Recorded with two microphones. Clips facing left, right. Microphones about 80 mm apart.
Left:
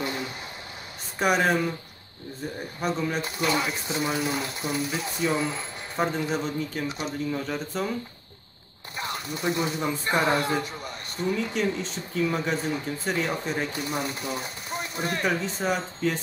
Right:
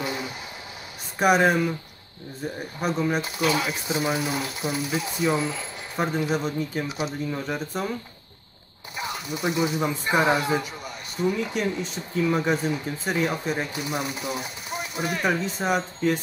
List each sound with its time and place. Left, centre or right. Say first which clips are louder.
0.0 s a sound: right 1 dB; centre
1.2 s speech: right 3 dB; centre
2.8 s speech: right 3 dB; centre
8.9 s speech: right 1 dB; centre